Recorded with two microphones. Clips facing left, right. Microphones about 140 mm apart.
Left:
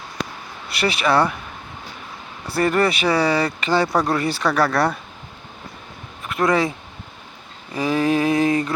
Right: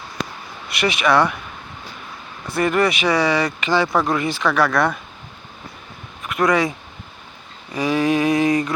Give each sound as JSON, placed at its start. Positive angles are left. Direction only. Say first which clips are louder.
{"t": 0.7, "sound": "speech", "louder": "right 1 dB", "side_deg": 30}
{"t": 2.5, "sound": "speech", "louder": "even", "side_deg": 35}
{"t": 6.2, "sound": "speech", "louder": "right 1 dB", "side_deg": 30}
{"t": 7.7, "sound": "a sound", "louder": "right 1 dB", "side_deg": 35}